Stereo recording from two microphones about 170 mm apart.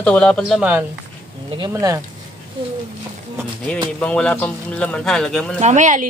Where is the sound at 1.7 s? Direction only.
20° right (ahead or behind).